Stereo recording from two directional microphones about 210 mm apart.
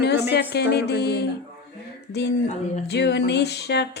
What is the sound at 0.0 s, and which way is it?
Music, 50° left (ahead or behind).